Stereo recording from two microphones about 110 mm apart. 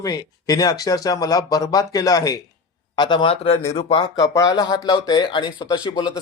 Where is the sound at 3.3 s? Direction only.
60° left (ahead or behind).